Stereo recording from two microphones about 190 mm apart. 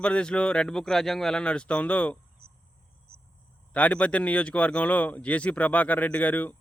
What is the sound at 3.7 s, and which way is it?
A man's voice, 5° left (ahead or behind).